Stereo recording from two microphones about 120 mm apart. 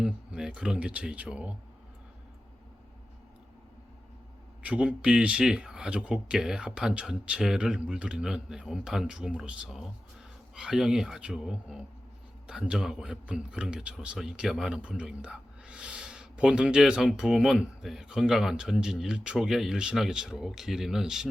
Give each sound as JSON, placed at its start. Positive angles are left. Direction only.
{"t": 0.0, "sound": "speech", "side_deg": -5}
{"t": 4.6, "sound": "a man's voice", "side_deg": -10}